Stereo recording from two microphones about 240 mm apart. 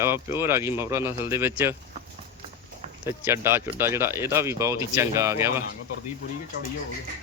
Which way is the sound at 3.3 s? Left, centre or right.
Centre.